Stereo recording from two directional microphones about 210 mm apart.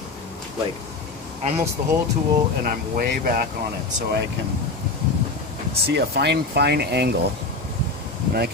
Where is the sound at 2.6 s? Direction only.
45° right (ahead or behind).